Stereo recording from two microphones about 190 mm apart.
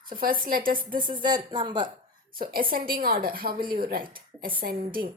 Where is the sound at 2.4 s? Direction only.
50° right (ahead or behind).